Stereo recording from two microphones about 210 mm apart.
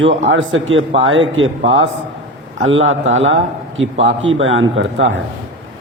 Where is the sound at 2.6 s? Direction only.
65° right (ahead or behind).